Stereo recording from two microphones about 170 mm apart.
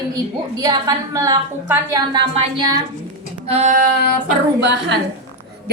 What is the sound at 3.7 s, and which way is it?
Female singing, 55° right (ahead or behind).